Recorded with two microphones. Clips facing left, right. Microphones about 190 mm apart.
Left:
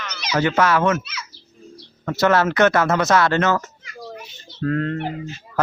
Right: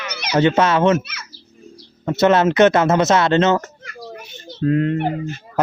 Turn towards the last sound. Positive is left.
turn(degrees=-55)  # may be behind; listen again after turning